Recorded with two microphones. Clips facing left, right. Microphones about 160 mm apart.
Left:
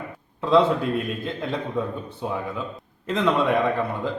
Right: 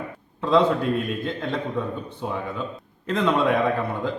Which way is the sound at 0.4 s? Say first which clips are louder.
Left 1 dB; centre (ahead or behind).